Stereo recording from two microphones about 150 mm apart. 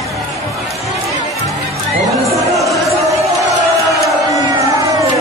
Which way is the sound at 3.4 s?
20° right (ahead or behind).